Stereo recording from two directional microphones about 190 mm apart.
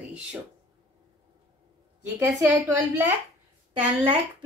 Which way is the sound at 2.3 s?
15° right (ahead or behind).